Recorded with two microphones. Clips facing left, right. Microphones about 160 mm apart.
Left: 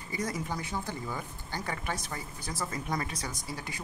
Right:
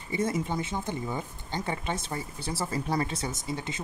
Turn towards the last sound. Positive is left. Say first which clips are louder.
# right 5 dB
turn(degrees=-25)  # may be behind; listen again after turning